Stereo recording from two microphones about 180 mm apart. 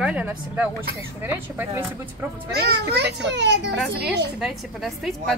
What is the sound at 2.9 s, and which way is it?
Speech, 70° right (ahead or behind).